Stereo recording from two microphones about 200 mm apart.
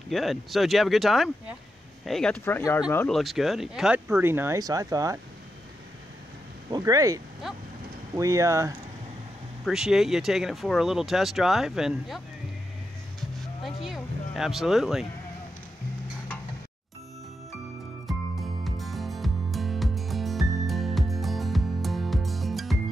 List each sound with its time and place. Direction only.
0.1 s speech: centre (ahead or behind)
3.2 s speech: centre (ahead or behind); by 5.2 s 15° right (ahead or behind)
6.7 s speech: 15° right (ahead or behind)
7.4 s speech: centre (ahead or behind)
8.1 s speech: 15° right (ahead or behind)
9.7 s speech: centre (ahead or behind)
13.7 s speech: centre (ahead or behind)
18.6 s music: centre (ahead or behind)